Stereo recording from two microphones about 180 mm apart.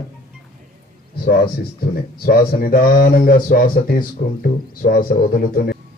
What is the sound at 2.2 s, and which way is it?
A man's voice, 55° left (ahead or behind).